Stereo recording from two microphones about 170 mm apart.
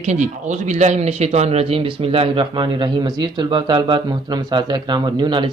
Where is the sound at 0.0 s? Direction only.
45° right (ahead or behind).